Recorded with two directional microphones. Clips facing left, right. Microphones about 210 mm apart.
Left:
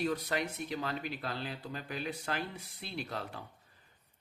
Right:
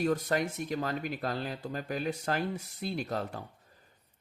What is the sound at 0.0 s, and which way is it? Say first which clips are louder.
Speech: right 5 dB; 45° right (ahead or behind).